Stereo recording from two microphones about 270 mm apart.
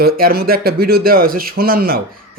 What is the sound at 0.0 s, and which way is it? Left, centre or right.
Speech, right.